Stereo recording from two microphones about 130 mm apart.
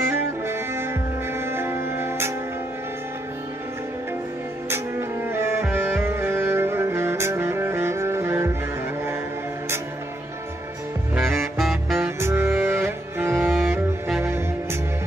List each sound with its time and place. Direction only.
0.1 s saxophone: 20° right (ahead or behind)
1.4 s music: 20° right (ahead or behind)
5.3 s music: 20° right (ahead or behind)
11.5 s saxophone: centre (ahead or behind)
12.2 s music: 20° right (ahead or behind)
13.6 s music: 5° right (ahead or behind)
14.2 s music: 20° right (ahead or behind)